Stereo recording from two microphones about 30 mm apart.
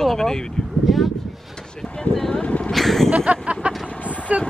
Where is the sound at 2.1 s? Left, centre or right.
Centre.